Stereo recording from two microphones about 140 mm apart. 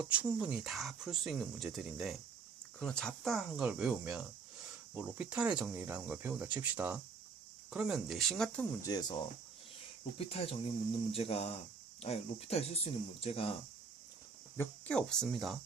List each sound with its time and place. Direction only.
0.0 s speech: 10° right (ahead or behind)
8.8 s speech: 30° left (ahead or behind)
10.2 s speech: 45° left (ahead or behind)
14.6 s speech: 5° left (ahead or behind)